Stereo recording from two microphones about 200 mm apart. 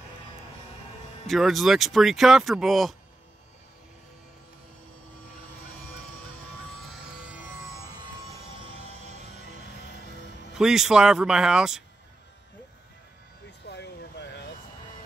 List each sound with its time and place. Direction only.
1.2 s speech: centre (ahead or behind)
10.5 s speech: centre (ahead or behind)
13.7 s air conditioning: 55° left (ahead or behind)